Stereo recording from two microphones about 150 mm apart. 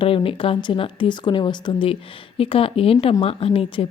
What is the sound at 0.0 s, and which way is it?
Speech, 35° left (ahead or behind).